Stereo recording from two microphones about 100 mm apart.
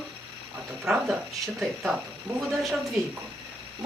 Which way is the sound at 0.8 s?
5° right (ahead or behind).